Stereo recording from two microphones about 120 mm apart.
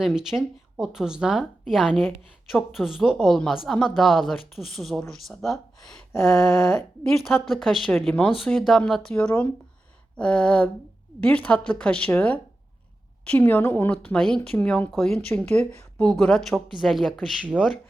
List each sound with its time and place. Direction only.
0.0 s a woman's voice: 5° right (ahead or behind)
17.4 s speech: 10° right (ahead or behind)